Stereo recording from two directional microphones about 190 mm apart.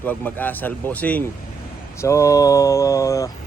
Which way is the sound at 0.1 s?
10° left (ahead or behind).